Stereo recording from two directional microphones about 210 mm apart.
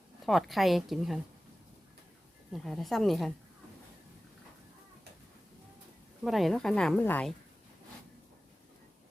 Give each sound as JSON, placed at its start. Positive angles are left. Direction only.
{"t": 0.3, "sound": "a woman's voice", "side_deg": 0}
{"t": 2.5, "sound": "a woman's voice", "side_deg": 0}
{"t": 6.2, "sound": "a woman's voice", "side_deg": 0}